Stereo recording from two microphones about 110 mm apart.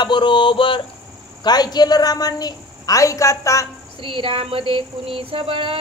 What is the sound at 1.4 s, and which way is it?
A man's voice, 40° left (ahead or behind).